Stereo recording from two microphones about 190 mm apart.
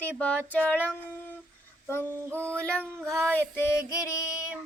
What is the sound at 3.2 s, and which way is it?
Female singing, 5° left (ahead or behind).